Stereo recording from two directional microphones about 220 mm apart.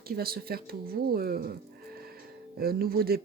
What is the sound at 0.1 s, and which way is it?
Speech, 45° right (ahead or behind).